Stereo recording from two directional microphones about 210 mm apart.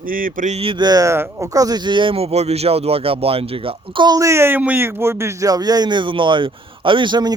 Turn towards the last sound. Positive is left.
turn(degrees=-20)  # may be behind; listen again after turning